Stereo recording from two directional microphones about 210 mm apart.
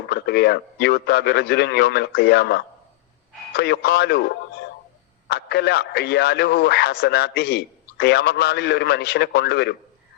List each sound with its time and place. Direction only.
0.1 s speech: 50° left (ahead or behind)